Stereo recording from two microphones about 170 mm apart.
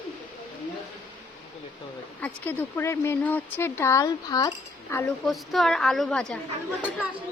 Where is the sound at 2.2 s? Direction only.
10° left (ahead or behind).